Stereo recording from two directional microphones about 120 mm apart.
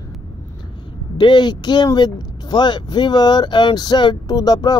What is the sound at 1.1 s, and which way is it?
Speech, 40° left (ahead or behind).